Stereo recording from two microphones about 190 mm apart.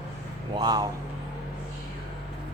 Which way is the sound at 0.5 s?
20° right (ahead or behind).